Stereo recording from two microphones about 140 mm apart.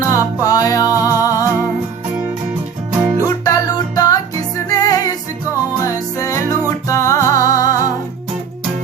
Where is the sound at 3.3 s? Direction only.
25° left (ahead or behind).